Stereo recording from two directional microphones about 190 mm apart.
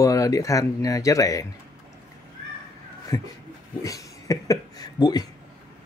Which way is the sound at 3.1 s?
15° left (ahead or behind).